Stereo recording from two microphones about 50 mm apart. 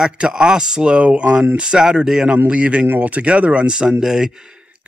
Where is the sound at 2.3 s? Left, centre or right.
Right; by 4.3 s centre.